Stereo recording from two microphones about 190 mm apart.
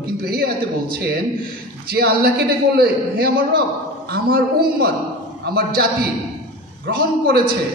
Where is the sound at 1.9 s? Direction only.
55° right (ahead or behind).